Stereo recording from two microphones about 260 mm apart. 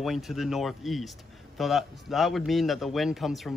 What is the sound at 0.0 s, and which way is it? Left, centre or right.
A man's voice, centre.